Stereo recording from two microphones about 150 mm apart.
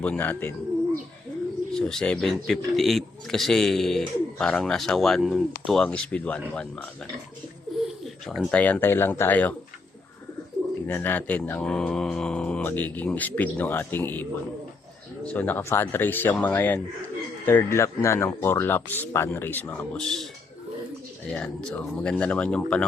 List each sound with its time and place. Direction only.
0.0 s speech: 10° left (ahead or behind)
1.7 s speech: 5° left (ahead or behind)
7.7 s a sound: centre (ahead or behind)
8.0 s bird: 5° right (ahead or behind)
8.4 s speech: 10° left (ahead or behind)
10.8 s speech: 15° left (ahead or behind)
21.2 s speech: 5° left (ahead or behind)